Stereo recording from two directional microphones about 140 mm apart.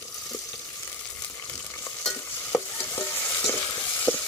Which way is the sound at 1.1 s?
10° left (ahead or behind).